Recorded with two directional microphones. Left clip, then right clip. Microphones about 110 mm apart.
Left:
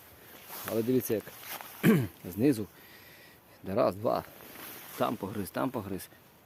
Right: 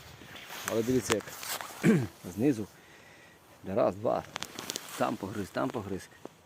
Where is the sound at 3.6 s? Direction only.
45° left (ahead or behind).